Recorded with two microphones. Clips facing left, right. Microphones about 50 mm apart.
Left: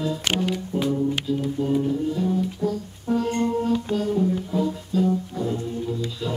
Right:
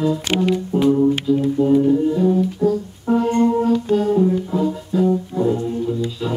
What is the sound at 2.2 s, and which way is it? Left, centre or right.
Music, right.